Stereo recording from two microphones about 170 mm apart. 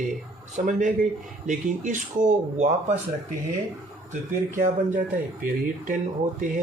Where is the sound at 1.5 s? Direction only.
50° right (ahead or behind).